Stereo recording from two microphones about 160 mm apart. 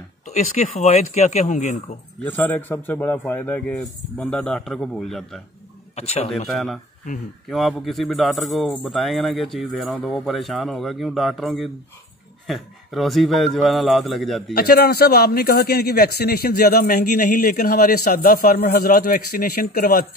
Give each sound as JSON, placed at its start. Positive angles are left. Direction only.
{"t": 0.2, "sound": "speech", "side_deg": 50}
{"t": 2.2, "sound": "a man's voice", "side_deg": 10}
{"t": 5.9, "sound": "speech", "side_deg": 40}
{"t": 6.5, "sound": "a man's voice", "side_deg": 0}
{"t": 14.5, "sound": "a man's voice", "side_deg": 80}